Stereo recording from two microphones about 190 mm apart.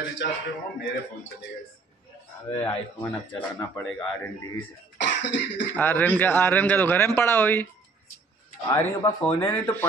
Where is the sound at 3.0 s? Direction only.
10° left (ahead or behind).